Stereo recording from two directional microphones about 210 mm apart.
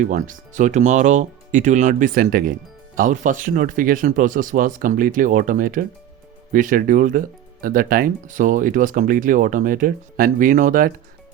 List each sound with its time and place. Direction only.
0.0 s speech: 35° right (ahead or behind)